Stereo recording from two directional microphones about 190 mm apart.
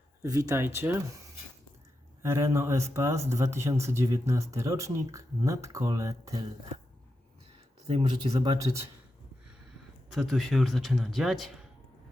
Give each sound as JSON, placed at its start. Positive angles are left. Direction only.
{"t": 0.2, "sound": "speech", "side_deg": -20}
{"t": 2.2, "sound": "speech", "side_deg": -15}
{"t": 8.3, "sound": "speech", "side_deg": -20}
{"t": 10.1, "sound": "a man's voice", "side_deg": 0}